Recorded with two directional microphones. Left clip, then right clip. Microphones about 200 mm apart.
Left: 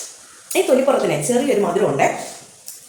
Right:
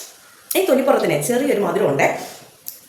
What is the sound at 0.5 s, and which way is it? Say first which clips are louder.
Speech: even; 10° right (ahead or behind).